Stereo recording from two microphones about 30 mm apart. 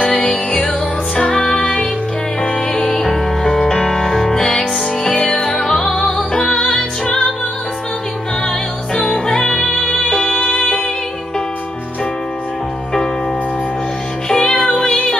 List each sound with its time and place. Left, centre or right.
0.0 s music: left
0.3 s music: left
5.0 s music: left
5.7 s music: centre
10.3 s music: left
14.3 s music: left